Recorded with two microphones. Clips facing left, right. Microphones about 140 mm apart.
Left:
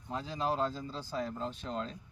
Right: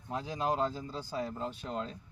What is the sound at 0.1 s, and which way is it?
Speech, 15° right (ahead or behind).